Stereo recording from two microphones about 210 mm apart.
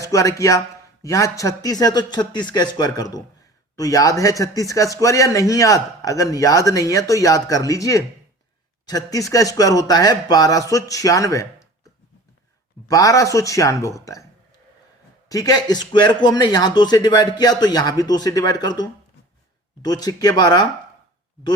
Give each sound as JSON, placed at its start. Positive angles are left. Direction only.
{"t": 0.0, "sound": "a man's voice", "side_deg": 15}
{"t": 12.9, "sound": "a man's voice", "side_deg": 15}
{"t": 15.3, "sound": "a man's voice", "side_deg": 15}